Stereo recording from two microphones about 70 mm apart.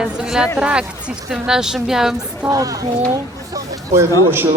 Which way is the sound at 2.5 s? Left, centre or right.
Right.